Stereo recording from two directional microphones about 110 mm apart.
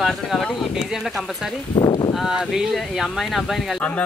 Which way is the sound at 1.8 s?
40° left (ahead or behind).